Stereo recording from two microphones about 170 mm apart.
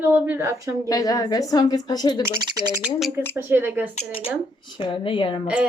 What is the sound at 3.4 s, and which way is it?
Speech, 10° right (ahead or behind).